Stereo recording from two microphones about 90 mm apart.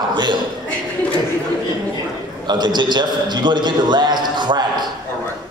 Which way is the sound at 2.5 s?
55° right (ahead or behind).